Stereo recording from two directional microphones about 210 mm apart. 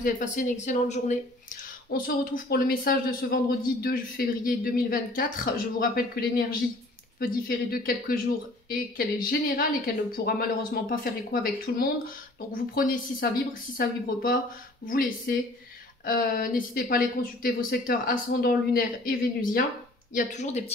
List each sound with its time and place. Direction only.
0.0 s speech: 35° left (ahead or behind)